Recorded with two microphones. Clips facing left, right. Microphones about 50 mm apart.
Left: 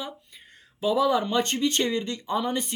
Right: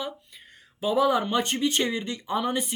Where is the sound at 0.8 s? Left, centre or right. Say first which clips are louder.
Even; right.